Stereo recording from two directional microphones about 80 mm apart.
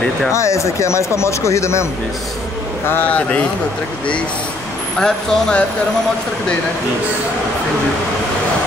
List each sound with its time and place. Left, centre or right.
0.3 s speech: left
2.9 s speech: centre
4.9 s speech: centre